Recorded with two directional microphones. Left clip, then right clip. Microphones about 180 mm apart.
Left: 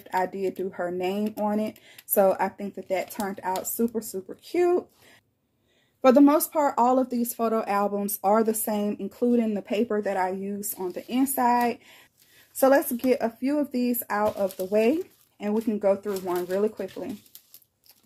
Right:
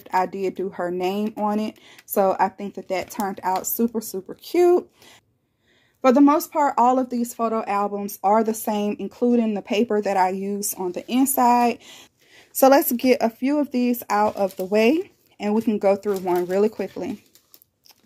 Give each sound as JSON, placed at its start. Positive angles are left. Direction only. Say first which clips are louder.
{"t": 0.0, "sound": "speech", "louder": "right 4 dB", "side_deg": -35}
{"t": 5.9, "sound": "speech", "louder": "right 2 dB", "side_deg": -15}